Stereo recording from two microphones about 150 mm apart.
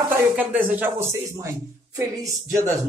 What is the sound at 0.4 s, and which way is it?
A man's voice, 10° right (ahead or behind).